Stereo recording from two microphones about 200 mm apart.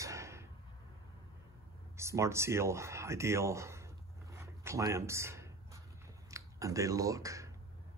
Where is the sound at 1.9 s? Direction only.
15° right (ahead or behind).